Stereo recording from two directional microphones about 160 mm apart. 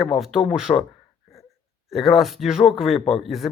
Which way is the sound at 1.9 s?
Centre (ahead or behind).